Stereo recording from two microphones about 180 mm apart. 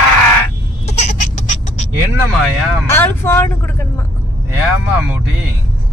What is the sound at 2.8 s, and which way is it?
Speech, 10° left (ahead or behind).